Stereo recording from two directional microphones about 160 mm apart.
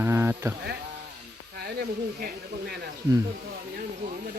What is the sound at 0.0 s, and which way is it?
Sheep, 15° right (ahead or behind).